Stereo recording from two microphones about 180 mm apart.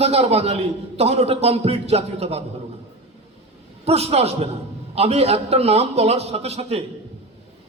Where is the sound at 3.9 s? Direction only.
35° right (ahead or behind).